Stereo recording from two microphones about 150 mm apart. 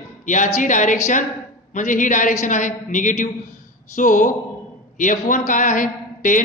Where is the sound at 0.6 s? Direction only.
55° left (ahead or behind).